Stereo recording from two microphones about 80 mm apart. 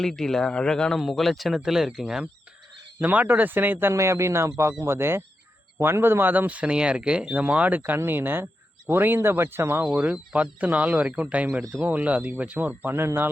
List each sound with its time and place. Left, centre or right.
0.0 s speech: centre
3.0 s speech: right
9.8 s speech: centre; by 13.2 s right